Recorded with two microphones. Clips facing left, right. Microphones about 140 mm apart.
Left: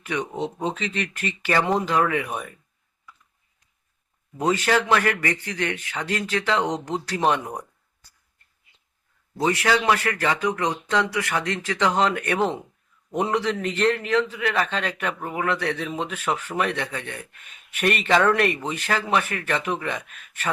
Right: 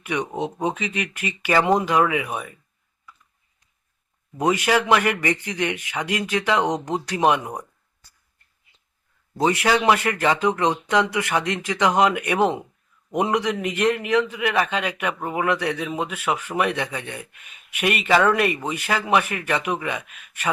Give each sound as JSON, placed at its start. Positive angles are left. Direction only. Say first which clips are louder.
{"t": 0.0, "sound": "a man's voice", "louder": "right 2 dB", "side_deg": -15}
{"t": 4.4, "sound": "a man's voice", "louder": "right 1 dB", "side_deg": -15}
{"t": 9.4, "sound": "a man's voice", "louder": "right 2 dB", "side_deg": -20}